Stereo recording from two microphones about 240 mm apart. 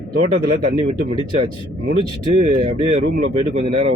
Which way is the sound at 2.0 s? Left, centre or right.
Right.